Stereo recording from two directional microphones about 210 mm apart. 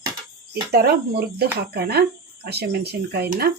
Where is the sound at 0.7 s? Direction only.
50° right (ahead or behind).